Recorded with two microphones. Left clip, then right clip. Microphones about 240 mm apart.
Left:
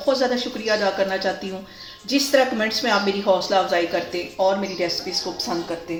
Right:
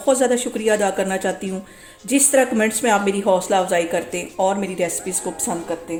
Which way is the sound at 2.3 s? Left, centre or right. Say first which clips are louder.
Right 1 dB; right.